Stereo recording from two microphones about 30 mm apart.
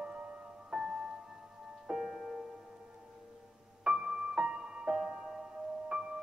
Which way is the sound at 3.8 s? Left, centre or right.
Right.